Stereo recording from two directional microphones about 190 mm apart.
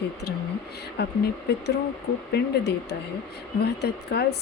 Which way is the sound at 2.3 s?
65° left (ahead or behind).